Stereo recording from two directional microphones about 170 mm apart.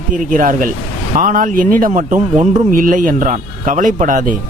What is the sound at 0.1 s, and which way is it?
A man's voice, 50° right (ahead or behind).